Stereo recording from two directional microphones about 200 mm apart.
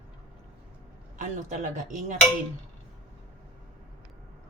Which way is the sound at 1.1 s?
40° right (ahead or behind).